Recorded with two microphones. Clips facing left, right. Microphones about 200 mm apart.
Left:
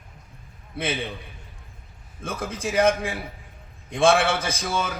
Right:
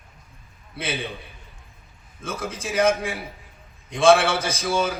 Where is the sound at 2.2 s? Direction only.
55° left (ahead or behind).